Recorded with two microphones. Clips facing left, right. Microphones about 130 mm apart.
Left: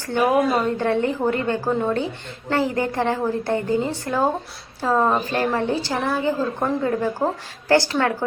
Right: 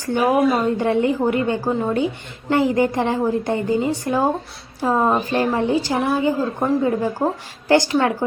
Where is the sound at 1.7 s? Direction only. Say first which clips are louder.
Left 3 dB; centre (ahead or behind).